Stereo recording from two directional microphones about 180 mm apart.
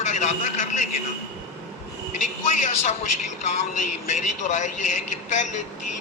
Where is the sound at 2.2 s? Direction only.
45° left (ahead or behind).